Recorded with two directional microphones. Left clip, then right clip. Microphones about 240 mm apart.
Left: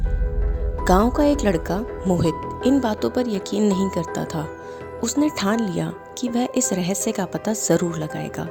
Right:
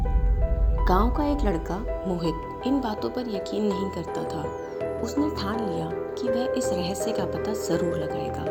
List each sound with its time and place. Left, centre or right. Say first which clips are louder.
0.9 s speech: left 7 dB; left
3.2 s speech: left 5 dB; left
4.1 s speech: left 2 dB; left